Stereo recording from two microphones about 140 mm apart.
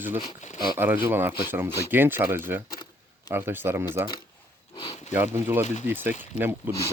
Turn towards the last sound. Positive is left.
turn(degrees=-15)  # may be behind; listen again after turning